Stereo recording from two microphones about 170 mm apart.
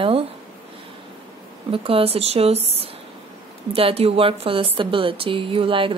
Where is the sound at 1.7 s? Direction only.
35° right (ahead or behind).